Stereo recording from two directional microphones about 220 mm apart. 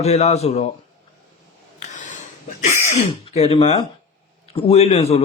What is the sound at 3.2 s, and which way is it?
Speech, 25° left (ahead or behind).